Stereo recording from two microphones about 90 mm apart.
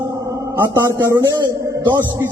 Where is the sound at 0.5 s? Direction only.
25° right (ahead or behind).